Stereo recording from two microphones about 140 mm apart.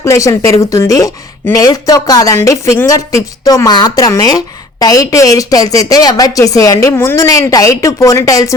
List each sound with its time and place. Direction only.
0.0 s speech: 20° left (ahead or behind)